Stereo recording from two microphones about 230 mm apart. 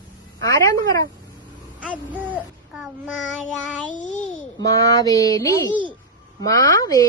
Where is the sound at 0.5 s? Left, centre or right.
Centre.